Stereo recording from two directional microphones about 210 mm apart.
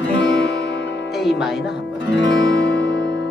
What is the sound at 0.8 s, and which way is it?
Music, 55° left (ahead or behind).